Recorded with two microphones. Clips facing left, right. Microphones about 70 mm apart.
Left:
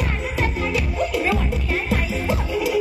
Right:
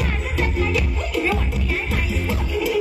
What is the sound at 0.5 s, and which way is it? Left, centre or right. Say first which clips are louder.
Music: right 1 dB; left.